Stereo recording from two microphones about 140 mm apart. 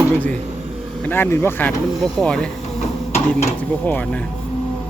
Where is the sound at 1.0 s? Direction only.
15° left (ahead or behind).